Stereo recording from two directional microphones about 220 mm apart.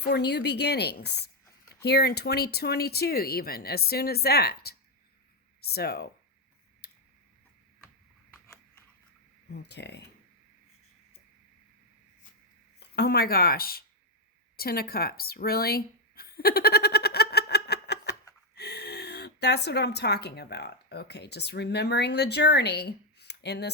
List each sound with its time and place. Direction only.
0.0 s speech: 50° left (ahead or behind)
9.6 s speech: 50° left (ahead or behind)
12.8 s speech: 50° left (ahead or behind)
14.5 s a sound: 45° left (ahead or behind)
18.5 s speech: 50° left (ahead or behind)